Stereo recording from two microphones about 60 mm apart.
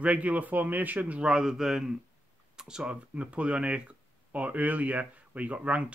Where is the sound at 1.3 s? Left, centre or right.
Centre.